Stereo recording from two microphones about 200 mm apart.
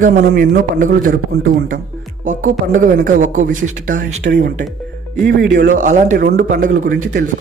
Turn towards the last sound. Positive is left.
turn(degrees=-45)  # may be behind; listen again after turning